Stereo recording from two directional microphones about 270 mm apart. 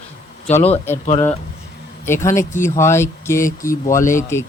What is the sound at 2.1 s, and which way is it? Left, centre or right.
Speech, centre.